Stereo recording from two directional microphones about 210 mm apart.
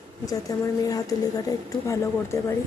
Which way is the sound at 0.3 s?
15° left (ahead or behind).